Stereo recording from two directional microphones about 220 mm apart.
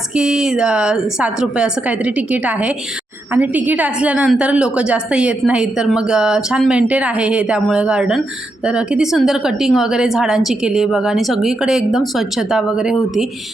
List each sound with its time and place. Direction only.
0.2 s a woman's voice: 5° right (ahead or behind)